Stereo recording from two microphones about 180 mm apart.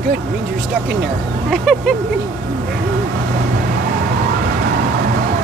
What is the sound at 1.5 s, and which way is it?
Speech, 5° left (ahead or behind).